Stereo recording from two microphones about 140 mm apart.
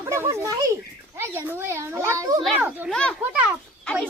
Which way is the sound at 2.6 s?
10° right (ahead or behind).